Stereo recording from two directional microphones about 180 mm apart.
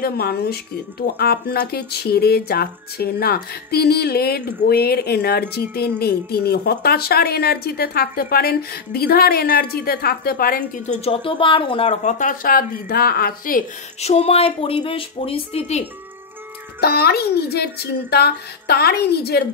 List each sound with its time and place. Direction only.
0.0 s speech: 60° left (ahead or behind)
11.1 s speech: 30° left (ahead or behind); by 13.7 s 55° left (ahead or behind)
14.0 s speech: 35° left (ahead or behind)
16.8 s speech: 60° left (ahead or behind)